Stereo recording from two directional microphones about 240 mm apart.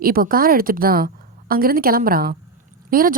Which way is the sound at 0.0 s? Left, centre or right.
Right.